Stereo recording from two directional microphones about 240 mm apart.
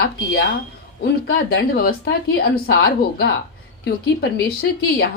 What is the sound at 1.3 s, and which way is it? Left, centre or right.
A woman's voice, left.